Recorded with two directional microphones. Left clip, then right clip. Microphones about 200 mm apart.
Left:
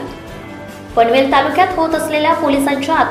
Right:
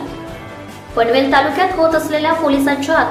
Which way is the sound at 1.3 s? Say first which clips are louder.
Left 1 dB; 5° left (ahead or behind).